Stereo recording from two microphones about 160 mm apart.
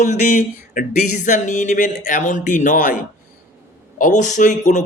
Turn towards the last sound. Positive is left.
turn(degrees=50)  # may be behind; listen again after turning